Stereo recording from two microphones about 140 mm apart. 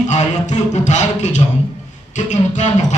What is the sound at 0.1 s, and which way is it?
Speech, 55° left (ahead or behind).